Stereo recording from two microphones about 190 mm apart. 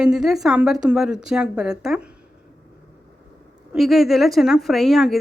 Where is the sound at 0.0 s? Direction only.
5° right (ahead or behind).